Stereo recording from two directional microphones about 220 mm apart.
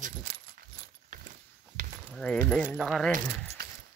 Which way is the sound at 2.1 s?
5° left (ahead or behind).